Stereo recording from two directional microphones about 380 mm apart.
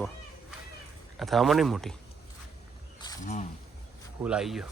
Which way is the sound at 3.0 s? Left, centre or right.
Centre.